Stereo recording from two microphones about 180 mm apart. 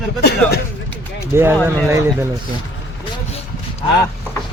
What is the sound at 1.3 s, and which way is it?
Speech, 15° right (ahead or behind).